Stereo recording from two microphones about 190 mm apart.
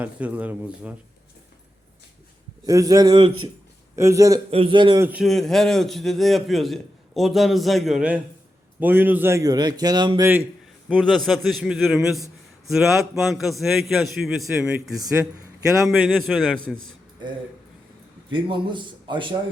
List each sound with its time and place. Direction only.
0.0 s speech: 10° right (ahead or behind)
2.6 s a man's voice: 20° right (ahead or behind)
4.5 s a man's voice: 25° right (ahead or behind)
4.9 s a man's voice: 10° right (ahead or behind); by 10.2 s 25° right (ahead or behind)
10.8 s a man's voice: 5° right (ahead or behind)
18.3 s a man's voice: 25° right (ahead or behind)